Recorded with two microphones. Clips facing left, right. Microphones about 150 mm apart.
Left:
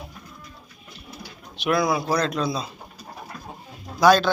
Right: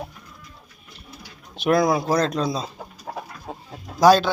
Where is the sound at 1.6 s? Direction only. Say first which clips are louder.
Right 3 dB; 45° right (ahead or behind).